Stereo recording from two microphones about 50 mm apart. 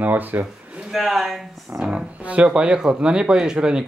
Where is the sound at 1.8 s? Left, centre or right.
Centre.